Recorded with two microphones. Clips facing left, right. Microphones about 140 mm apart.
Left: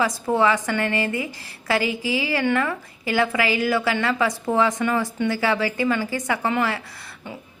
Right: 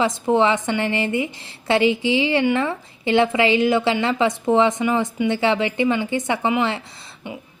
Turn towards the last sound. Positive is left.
turn(degrees=-20)  # may be behind; listen again after turning